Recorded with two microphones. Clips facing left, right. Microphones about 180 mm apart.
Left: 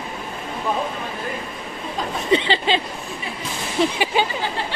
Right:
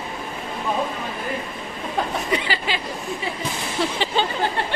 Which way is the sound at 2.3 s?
25° left (ahead or behind).